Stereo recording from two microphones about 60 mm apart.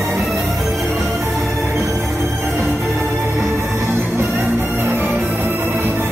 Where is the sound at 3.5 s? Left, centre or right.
Right.